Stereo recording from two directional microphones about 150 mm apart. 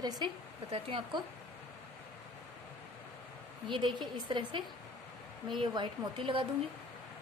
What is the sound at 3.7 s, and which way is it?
Speech, 30° right (ahead or behind).